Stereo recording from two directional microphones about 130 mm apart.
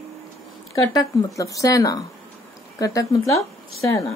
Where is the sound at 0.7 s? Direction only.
25° left (ahead or behind).